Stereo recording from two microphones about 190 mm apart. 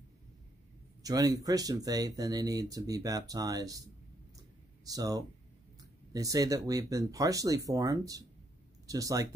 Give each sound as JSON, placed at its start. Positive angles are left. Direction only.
{"t": 1.0, "sound": "speech", "side_deg": -20}
{"t": 4.8, "sound": "speech", "side_deg": -20}